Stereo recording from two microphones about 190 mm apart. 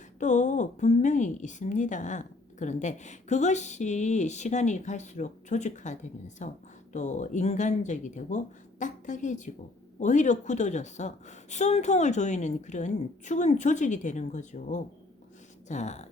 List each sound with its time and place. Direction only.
0.2 s a woman's voice: 40° left (ahead or behind)